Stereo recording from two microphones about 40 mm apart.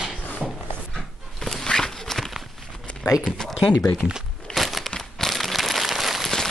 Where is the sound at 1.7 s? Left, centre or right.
Centre.